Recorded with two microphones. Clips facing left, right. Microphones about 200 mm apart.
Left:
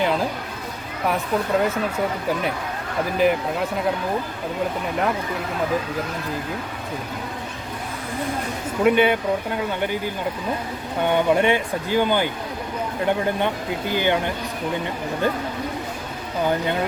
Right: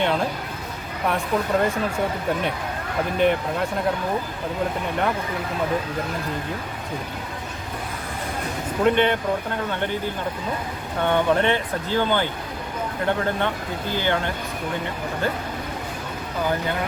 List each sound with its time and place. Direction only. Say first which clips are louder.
0.0 s a sound: left 1 dB; centre (ahead or behind)
1.0 s speech: left 1 dB; 5° left (ahead or behind)
3.2 s speech: left 1 dB; 5° left (ahead or behind)
8.8 s speech: left 2 dB; 10° left (ahead or behind)
11.1 s speech: left 2 dB; 15° left (ahead or behind)